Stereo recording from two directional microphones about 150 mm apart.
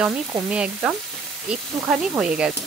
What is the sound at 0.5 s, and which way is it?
Speech, 5° right (ahead or behind).